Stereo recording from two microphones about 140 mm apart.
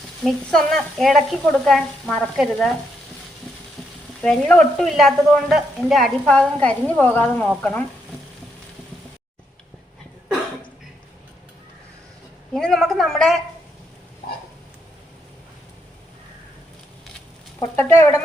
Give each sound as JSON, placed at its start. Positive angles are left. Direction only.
{"t": 0.3, "sound": "a woman's voice", "side_deg": 5}
{"t": 4.2, "sound": "a woman's voice", "side_deg": 5}
{"t": 12.5, "sound": "a sound", "side_deg": 0}
{"t": 17.6, "sound": "speech", "side_deg": 20}